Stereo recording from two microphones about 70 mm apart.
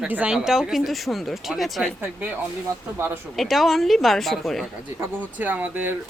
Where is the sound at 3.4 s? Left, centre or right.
Centre.